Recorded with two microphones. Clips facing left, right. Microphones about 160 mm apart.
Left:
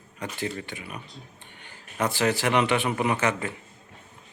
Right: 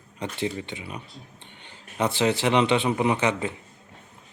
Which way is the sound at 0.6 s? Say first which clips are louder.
Right 2 dB; 25° right (ahead or behind).